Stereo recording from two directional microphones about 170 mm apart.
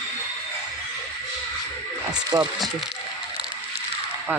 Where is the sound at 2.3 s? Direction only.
5° right (ahead or behind).